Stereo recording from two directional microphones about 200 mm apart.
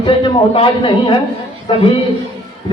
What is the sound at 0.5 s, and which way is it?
A man's voice, 25° left (ahead or behind).